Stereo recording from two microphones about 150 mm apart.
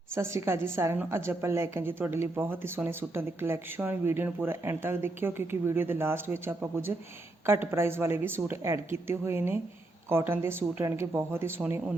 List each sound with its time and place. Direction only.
0.1 s a woman's voice: 15° right (ahead or behind)